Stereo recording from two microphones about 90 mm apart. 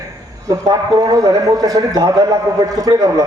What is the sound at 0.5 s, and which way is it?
A man's voice, 45° right (ahead or behind).